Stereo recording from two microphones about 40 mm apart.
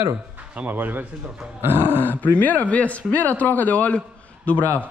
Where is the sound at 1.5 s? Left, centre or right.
Right.